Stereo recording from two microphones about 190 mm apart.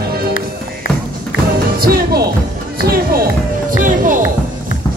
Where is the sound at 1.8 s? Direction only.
55° right (ahead or behind).